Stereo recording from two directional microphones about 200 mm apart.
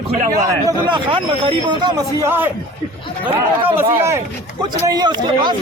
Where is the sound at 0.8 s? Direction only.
25° right (ahead or behind).